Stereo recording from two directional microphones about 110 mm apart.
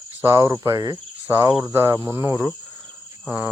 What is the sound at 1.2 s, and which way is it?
Cricket, 25° right (ahead or behind).